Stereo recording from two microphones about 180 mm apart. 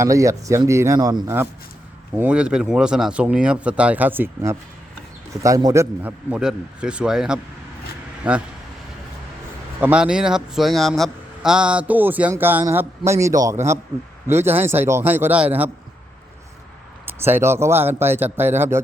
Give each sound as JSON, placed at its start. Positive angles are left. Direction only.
{"t": 0.0, "sound": "speech", "side_deg": -15}
{"t": 2.1, "sound": "speech", "side_deg": -5}
{"t": 9.8, "sound": "speech", "side_deg": -5}
{"t": 17.1, "sound": "speech", "side_deg": -10}